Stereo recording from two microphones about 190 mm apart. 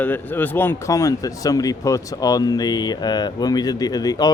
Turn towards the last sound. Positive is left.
turn(degrees=20)  # may be behind; listen again after turning